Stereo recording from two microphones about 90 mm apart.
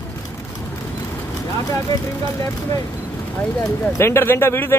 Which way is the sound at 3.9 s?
25° left (ahead or behind).